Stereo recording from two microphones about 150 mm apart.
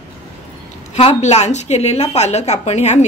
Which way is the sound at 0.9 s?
45° left (ahead or behind).